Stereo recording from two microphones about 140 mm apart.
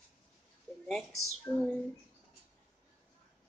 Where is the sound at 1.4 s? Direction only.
5° left (ahead or behind).